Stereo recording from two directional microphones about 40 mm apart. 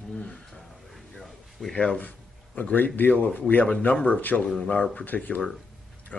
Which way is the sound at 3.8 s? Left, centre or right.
Left.